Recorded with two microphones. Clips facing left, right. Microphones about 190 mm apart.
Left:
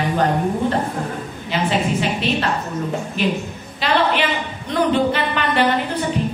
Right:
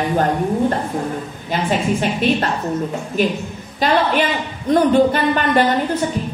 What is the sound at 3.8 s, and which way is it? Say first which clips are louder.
A woman's voice: right 2 dB; 45° right (ahead or behind).